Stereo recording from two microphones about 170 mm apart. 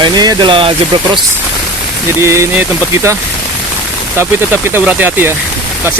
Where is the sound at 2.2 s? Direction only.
15° right (ahead or behind).